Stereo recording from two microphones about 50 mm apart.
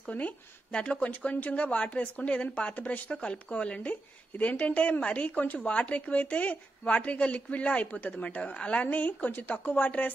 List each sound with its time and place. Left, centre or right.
0.1 s speech: left
0.7 s speech: left
2.8 s speech: left
3.2 s speech: left